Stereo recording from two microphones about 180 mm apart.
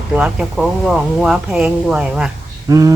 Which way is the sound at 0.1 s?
5° right (ahead or behind).